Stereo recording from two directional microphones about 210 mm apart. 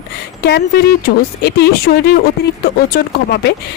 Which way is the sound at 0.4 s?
50° left (ahead or behind).